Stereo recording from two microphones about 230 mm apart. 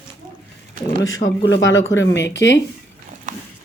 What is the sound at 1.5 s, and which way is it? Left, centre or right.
Speech, left.